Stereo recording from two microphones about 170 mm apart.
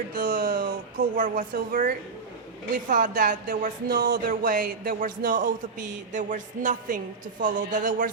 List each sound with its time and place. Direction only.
0.1 s speech: 55° right (ahead or behind)